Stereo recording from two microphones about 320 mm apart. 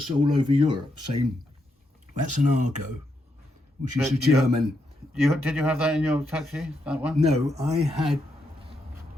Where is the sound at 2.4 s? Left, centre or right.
Right.